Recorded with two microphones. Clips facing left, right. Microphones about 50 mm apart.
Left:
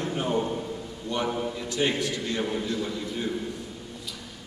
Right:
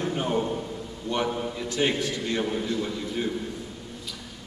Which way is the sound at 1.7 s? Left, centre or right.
Centre.